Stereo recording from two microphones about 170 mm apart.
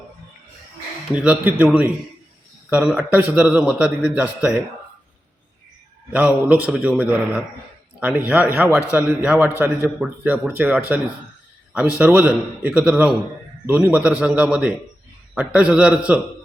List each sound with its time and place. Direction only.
1.1 s a man's voice: 5° right (ahead or behind)
6.1 s a man's voice: 10° right (ahead or behind)